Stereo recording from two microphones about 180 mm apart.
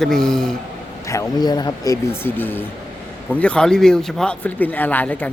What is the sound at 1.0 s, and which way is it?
Speech, 20° left (ahead or behind).